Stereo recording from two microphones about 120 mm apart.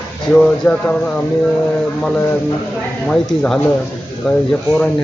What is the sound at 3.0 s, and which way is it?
A man's voice, 5° left (ahead or behind).